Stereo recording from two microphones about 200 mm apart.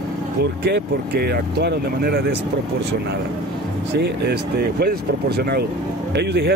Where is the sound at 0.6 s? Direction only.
55° right (ahead or behind).